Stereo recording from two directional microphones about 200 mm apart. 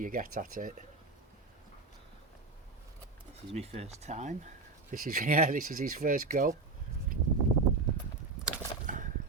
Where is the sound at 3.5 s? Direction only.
35° right (ahead or behind).